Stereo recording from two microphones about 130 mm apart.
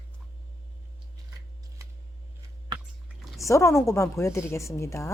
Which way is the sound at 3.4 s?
25° left (ahead or behind).